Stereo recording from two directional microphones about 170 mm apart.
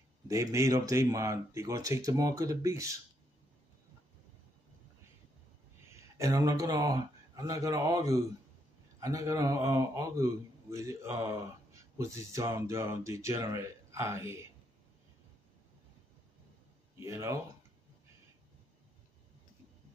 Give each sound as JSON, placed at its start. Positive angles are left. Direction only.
{"t": 0.3, "sound": "speech", "side_deg": -20}
{"t": 5.9, "sound": "a man's voice", "side_deg": -15}
{"t": 17.0, "sound": "a man's voice", "side_deg": -20}